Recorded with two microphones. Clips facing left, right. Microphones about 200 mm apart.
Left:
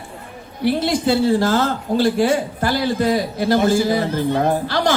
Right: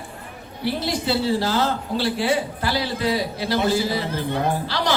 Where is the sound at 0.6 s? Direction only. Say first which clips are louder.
Left 6 dB; 50° left (ahead or behind).